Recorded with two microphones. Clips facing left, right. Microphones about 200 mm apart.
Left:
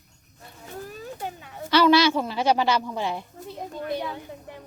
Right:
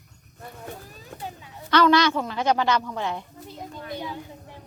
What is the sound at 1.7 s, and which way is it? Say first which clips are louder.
A woman's voice: left 1 dB; 10° left (ahead or behind).